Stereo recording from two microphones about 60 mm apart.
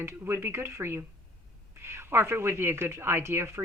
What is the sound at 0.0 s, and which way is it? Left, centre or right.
Speech, right.